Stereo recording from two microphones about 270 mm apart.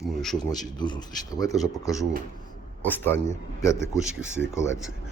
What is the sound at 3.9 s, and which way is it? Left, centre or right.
Speech, centre.